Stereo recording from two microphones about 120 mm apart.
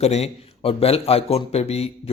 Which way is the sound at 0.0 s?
60° left (ahead or behind).